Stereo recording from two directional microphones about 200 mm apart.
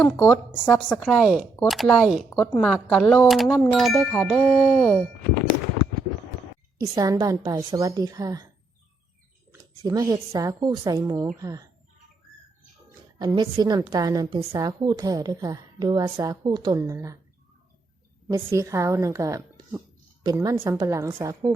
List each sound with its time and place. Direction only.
0.0 s speech: centre (ahead or behind)
2.3 s speech: 10° left (ahead or behind)
6.7 s a woman's voice: 15° right (ahead or behind)
9.5 s a woman's voice: 20° right (ahead or behind)
13.1 s a woman's voice: 20° right (ahead or behind)
18.3 s a woman's voice: 15° right (ahead or behind)